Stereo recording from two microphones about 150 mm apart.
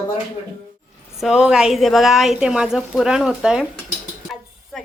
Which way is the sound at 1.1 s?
5° right (ahead or behind).